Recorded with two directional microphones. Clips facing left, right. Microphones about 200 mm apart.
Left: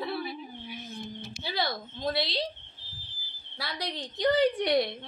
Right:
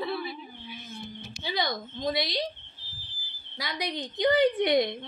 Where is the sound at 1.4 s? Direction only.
5° left (ahead or behind).